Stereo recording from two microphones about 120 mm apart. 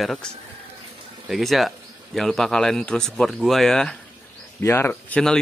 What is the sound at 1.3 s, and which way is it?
Speech, centre (ahead or behind).